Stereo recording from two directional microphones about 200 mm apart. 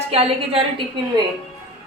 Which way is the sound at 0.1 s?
30° right (ahead or behind).